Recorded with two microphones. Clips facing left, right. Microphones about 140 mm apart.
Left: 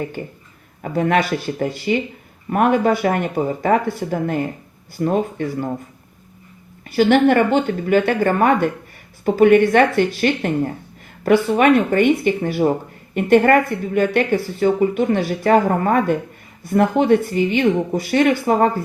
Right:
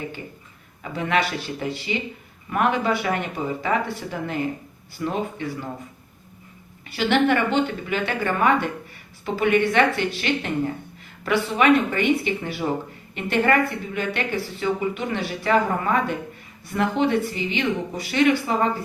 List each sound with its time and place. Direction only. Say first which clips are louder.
0.2 s speech: left 7 dB; 50° left (ahead or behind)
6.9 s speech: left 6 dB; 45° left (ahead or behind)